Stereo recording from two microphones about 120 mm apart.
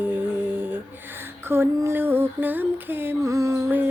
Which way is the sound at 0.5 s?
15° right (ahead or behind).